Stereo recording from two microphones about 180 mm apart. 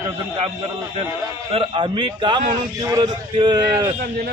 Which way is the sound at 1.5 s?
30° right (ahead or behind).